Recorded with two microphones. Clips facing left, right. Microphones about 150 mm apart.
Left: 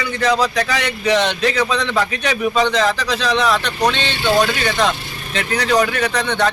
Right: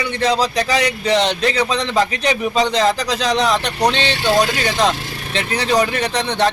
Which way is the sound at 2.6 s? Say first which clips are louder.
Right 3 dB; 35° right (ahead or behind).